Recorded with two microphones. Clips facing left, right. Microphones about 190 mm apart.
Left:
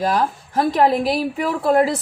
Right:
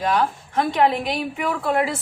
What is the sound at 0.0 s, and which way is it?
A woman's voice, 35° left (ahead or behind).